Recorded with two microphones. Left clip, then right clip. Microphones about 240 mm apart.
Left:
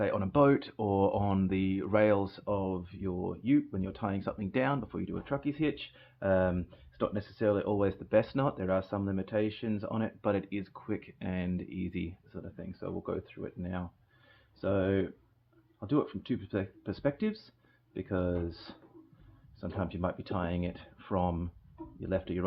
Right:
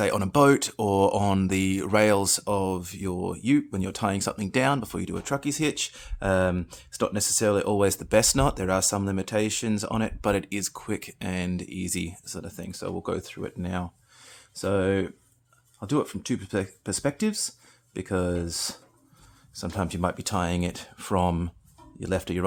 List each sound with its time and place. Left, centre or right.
0.0 s speech: right